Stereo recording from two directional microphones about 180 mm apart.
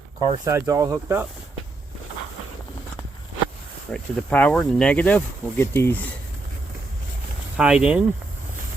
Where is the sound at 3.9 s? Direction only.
5° left (ahead or behind).